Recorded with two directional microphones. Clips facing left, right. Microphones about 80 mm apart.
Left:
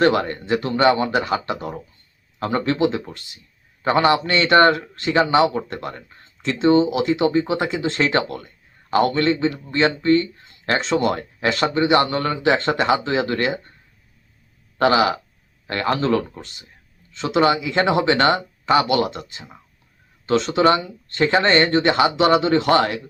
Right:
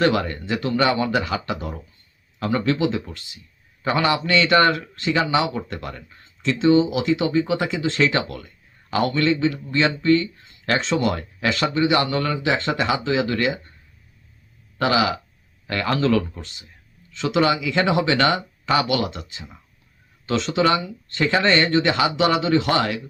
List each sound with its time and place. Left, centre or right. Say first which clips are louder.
0.0 s speech: left 2 dB; left
14.8 s speech: left 3 dB; left